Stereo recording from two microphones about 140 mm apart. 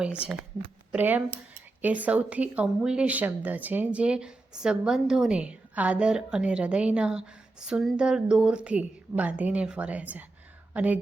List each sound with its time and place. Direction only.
0.9 s speech: 10° right (ahead or behind)